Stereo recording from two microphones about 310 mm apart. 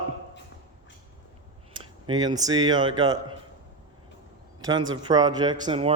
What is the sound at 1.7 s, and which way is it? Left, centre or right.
Speech, centre.